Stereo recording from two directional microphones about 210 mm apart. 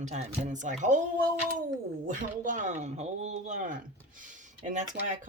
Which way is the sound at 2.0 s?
40° right (ahead or behind).